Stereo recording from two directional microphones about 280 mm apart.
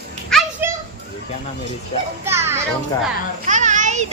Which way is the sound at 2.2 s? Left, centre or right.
Centre.